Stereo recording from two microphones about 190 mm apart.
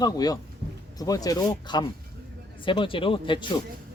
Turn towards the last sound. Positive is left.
turn(degrees=25)  # may be behind; listen again after turning